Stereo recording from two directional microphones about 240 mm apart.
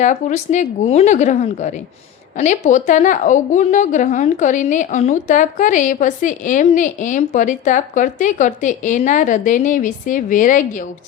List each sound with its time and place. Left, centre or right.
0.0 s a woman's voice: left